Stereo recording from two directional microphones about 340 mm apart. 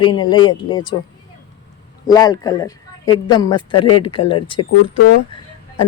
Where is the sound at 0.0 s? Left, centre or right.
Left.